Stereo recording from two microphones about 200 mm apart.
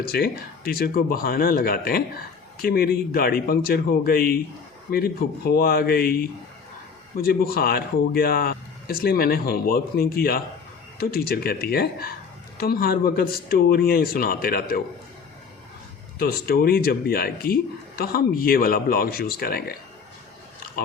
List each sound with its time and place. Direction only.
0.0 s speech: 50° left (ahead or behind)
16.1 s speech: 50° left (ahead or behind)